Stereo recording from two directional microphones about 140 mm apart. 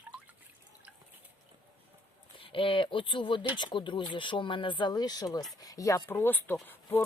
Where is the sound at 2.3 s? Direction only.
40° left (ahead or behind); by 7.0 s 15° left (ahead or behind).